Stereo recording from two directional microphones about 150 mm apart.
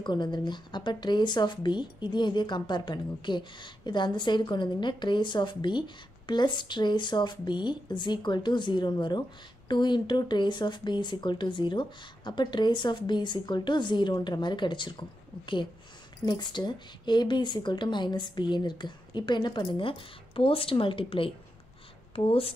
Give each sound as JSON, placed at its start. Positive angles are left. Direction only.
{"t": 0.0, "sound": "speech", "side_deg": 30}